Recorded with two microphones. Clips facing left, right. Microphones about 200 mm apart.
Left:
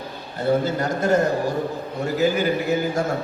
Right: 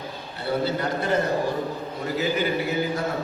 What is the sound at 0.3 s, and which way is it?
A man's voice, 45° left (ahead or behind).